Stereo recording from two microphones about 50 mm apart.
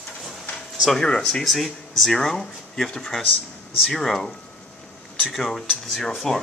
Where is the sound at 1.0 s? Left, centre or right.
Centre.